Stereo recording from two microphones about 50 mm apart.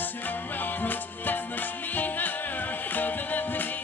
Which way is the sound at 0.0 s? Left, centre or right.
Left.